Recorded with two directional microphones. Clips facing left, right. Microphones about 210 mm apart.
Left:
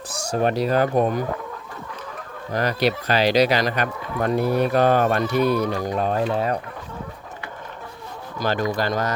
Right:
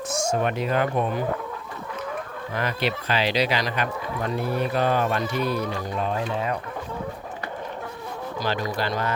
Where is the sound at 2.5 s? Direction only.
40° left (ahead or behind).